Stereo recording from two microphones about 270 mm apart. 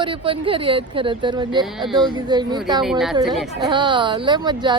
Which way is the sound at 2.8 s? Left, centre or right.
Centre.